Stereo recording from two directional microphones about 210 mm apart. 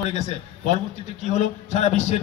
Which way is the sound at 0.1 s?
30° left (ahead or behind).